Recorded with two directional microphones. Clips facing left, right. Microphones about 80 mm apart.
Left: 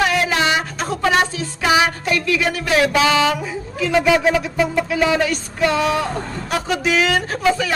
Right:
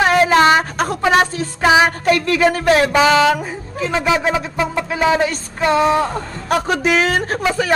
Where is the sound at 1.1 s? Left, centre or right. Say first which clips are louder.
Right 3 dB; right.